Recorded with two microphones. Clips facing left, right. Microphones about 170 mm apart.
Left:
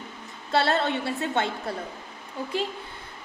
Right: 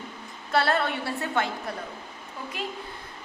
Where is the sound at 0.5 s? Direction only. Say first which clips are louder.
Left 1 dB; 25° left (ahead or behind).